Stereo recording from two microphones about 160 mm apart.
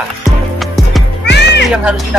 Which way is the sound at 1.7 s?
5° right (ahead or behind).